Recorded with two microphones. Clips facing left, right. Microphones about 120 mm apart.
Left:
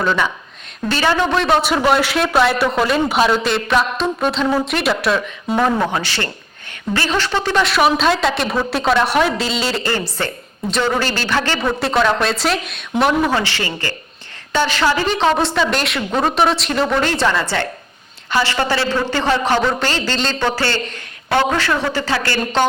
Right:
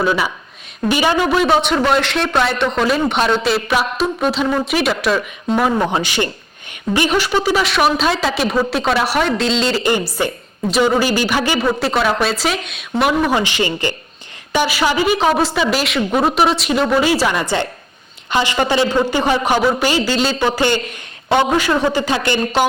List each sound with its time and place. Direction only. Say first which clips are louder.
0.0 s a man's voice: right 1 dB; 10° right (ahead or behind)
9.8 s a man's voice: right 4 dB; 15° right (ahead or behind)
13.3 s a man's voice: right 3 dB; 15° right (ahead or behind)